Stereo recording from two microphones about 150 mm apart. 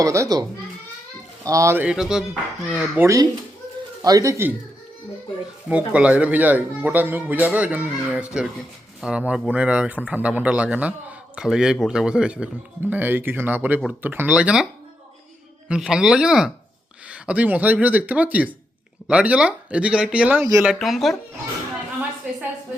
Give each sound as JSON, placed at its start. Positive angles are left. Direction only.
{"t": 0.0, "sound": "speech", "side_deg": -20}
{"t": 1.5, "sound": "speech", "side_deg": -20}
{"t": 4.0, "sound": "speech", "side_deg": -25}
{"t": 5.6, "sound": "speech", "side_deg": -10}
{"t": 15.7, "sound": "speech", "side_deg": -5}